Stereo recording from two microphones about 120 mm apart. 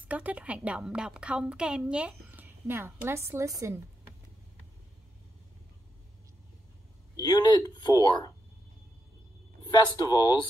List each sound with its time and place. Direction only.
0.1 s a woman's voice: 10° right (ahead or behind)
7.2 s speech: 35° left (ahead or behind)
9.7 s speech: 35° left (ahead or behind)